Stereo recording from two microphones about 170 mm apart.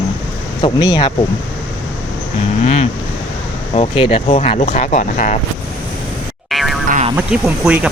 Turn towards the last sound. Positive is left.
turn(degrees=-5)  # may be behind; listen again after turning